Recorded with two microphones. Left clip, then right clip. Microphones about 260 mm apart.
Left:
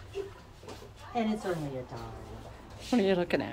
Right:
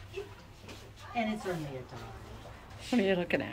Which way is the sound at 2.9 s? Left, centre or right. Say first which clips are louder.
Left 2 dB; centre.